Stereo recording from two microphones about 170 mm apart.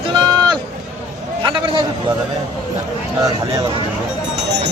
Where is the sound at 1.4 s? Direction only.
30° right (ahead or behind).